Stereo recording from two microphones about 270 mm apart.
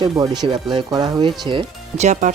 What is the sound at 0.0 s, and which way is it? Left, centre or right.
Speech, centre.